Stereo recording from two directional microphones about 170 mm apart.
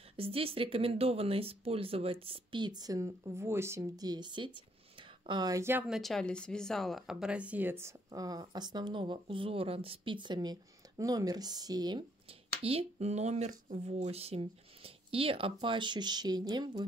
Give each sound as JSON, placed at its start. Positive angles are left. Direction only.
{"t": 0.2, "sound": "a woman's voice", "side_deg": -35}